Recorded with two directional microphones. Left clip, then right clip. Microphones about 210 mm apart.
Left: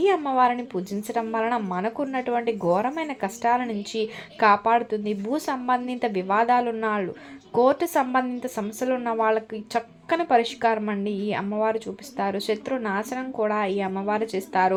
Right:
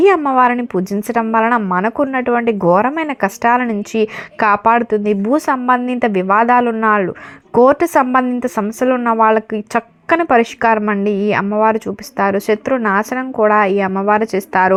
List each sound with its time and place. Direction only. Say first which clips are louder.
0.0 s speech: right 9 dB; 25° right (ahead or behind)